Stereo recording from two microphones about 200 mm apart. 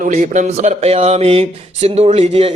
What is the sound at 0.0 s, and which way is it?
Speech, 35° right (ahead or behind).